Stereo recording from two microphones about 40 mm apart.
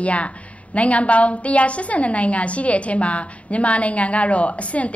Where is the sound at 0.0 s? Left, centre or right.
Left.